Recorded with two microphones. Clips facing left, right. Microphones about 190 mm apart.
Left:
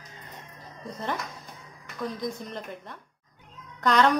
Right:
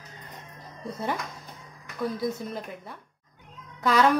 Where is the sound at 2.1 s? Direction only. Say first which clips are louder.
Right 3 dB; 5° right (ahead or behind).